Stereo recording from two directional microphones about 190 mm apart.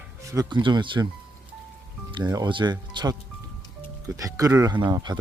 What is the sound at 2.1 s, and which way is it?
Speech, 20° right (ahead or behind).